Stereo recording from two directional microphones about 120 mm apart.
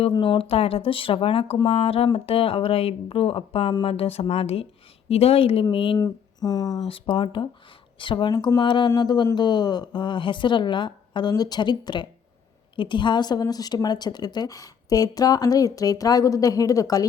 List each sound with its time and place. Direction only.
0.1 s speech: 45° left (ahead or behind)
6.0 s speech: 35° left (ahead or behind)
6.8 s a woman's voice: 50° left (ahead or behind); by 17.1 s 30° left (ahead or behind)